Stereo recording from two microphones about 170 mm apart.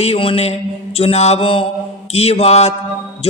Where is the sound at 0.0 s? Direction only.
35° left (ahead or behind).